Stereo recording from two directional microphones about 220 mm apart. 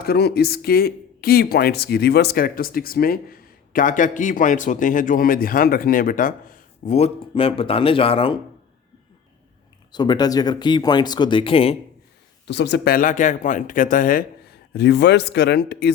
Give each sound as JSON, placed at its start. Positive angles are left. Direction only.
{"t": 0.0, "sound": "speech", "side_deg": 45}
{"t": 9.9, "sound": "speech", "side_deg": 20}
{"t": 12.5, "sound": "speech", "side_deg": 50}